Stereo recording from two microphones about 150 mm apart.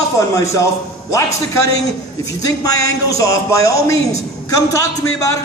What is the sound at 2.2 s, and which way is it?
Speech, 25° left (ahead or behind).